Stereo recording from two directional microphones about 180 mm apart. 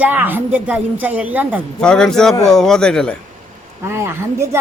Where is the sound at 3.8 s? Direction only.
15° right (ahead or behind).